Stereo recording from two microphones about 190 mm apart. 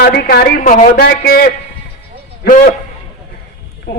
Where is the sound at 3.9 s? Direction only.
60° left (ahead or behind).